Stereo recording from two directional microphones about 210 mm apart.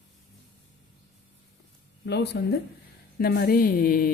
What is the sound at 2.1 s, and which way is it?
Speech, 55° left (ahead or behind).